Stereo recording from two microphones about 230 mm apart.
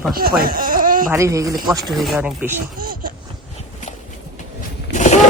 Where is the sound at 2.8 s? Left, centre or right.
Right.